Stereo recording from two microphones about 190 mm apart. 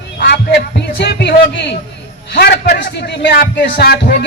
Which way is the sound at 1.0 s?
60° left (ahead or behind).